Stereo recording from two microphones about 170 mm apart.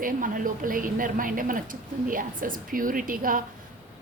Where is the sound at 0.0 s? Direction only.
55° right (ahead or behind).